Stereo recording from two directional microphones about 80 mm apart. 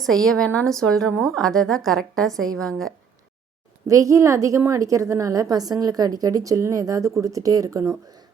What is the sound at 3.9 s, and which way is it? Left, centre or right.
A woman's voice, right.